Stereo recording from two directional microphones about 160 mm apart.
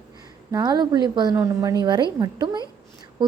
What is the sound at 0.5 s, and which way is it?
A woman's voice, 25° right (ahead or behind).